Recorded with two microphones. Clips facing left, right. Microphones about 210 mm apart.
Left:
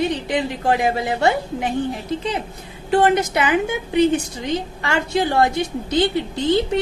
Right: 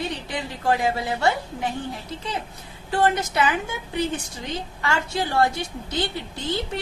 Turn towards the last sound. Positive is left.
turn(degrees=20)  # may be behind; listen again after turning